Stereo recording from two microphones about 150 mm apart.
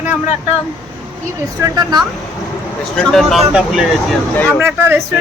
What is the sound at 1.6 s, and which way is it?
Speech, 25° right (ahead or behind).